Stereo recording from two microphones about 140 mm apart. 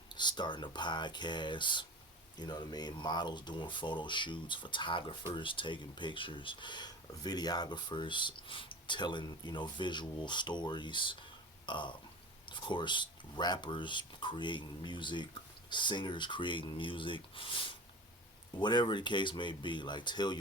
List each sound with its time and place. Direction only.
0.1 s speech: 30° left (ahead or behind)
11.6 s burping: 35° left (ahead or behind)
12.5 s speech: 35° left (ahead or behind)
18.6 s speech: 30° left (ahead or behind)